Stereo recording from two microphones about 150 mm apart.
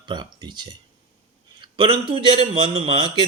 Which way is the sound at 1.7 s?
35° right (ahead or behind).